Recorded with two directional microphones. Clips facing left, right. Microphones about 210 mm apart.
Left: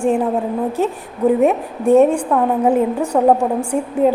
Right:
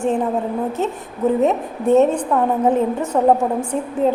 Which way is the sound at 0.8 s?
10° left (ahead or behind).